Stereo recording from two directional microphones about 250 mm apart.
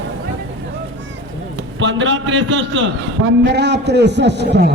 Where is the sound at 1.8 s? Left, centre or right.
Right.